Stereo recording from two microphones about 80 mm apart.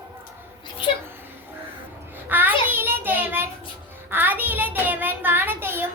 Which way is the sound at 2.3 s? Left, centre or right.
Right.